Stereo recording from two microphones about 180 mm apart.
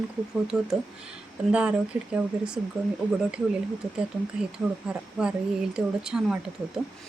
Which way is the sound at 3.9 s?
5° right (ahead or behind).